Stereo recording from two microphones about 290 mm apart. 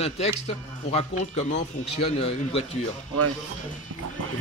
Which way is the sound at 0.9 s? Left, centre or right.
Left.